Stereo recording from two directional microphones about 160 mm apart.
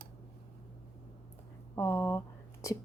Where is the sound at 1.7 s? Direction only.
15° left (ahead or behind).